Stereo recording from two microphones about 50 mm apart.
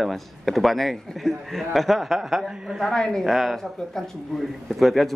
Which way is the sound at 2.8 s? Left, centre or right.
Centre.